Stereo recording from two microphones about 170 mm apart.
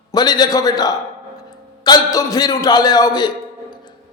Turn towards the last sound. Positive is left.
turn(degrees=25)  # may be behind; listen again after turning